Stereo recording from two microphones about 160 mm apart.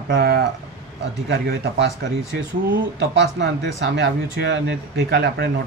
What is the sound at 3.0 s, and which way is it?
Speech, 90° right.